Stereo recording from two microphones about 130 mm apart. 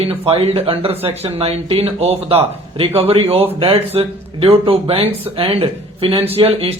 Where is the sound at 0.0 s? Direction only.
50° right (ahead or behind).